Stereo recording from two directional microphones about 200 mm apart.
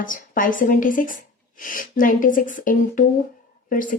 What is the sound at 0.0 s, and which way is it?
Speech, 40° left (ahead or behind).